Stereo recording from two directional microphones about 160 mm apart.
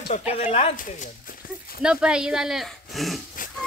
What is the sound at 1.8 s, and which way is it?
Speech, 5° right (ahead or behind).